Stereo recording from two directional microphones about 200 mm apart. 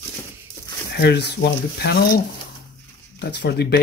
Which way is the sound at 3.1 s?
55° left (ahead or behind).